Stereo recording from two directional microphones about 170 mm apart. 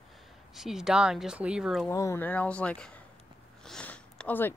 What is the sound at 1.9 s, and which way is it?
Speech, 15° left (ahead or behind).